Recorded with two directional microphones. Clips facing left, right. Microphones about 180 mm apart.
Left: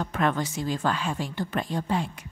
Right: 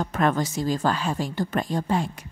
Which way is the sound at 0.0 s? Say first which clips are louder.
Right 3 dB; 40° right (ahead or behind).